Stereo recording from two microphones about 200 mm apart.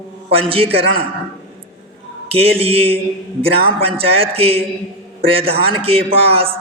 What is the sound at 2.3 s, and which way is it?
Speech, 30° right (ahead or behind).